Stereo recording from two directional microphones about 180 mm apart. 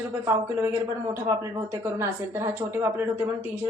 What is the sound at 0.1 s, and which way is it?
Speech, 15° right (ahead or behind).